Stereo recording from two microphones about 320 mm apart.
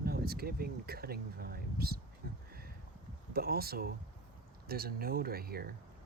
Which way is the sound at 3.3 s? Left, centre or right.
Right.